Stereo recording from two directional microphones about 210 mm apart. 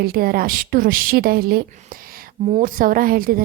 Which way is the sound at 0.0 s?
45° right (ahead or behind).